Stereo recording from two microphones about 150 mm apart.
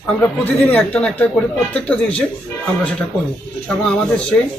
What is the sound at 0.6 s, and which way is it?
Speech, 10° left (ahead or behind).